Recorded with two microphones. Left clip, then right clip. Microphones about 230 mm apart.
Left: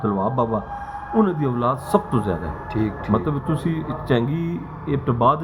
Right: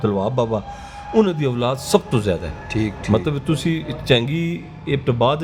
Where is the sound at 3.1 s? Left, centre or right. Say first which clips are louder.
Right 4 dB; right.